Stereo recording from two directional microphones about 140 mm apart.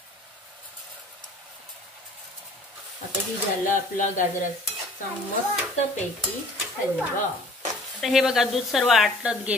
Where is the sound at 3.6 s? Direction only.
70° left (ahead or behind).